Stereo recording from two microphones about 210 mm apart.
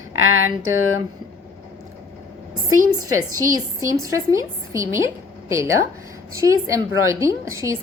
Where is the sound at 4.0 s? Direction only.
15° right (ahead or behind).